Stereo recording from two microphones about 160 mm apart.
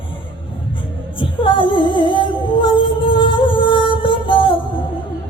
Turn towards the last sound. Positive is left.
turn(degrees=30)  # may be behind; listen again after turning